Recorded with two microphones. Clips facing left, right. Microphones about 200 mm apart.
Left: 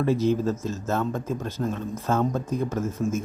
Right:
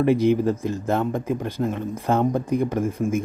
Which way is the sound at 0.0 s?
15° right (ahead or behind).